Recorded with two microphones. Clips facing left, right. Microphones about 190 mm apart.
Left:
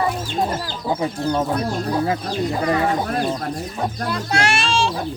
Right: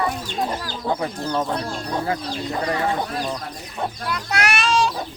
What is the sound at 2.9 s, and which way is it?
Speech, 45° left (ahead or behind).